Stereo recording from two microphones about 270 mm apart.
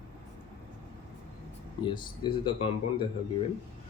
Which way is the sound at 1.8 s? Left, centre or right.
Centre.